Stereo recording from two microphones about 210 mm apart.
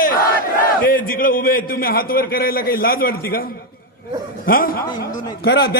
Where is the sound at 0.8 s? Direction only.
45° left (ahead or behind).